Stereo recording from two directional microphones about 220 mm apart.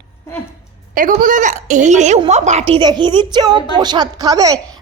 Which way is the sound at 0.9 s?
40° right (ahead or behind).